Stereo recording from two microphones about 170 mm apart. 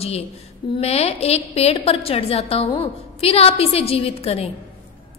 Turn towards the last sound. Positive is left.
turn(degrees=35)  # may be behind; listen again after turning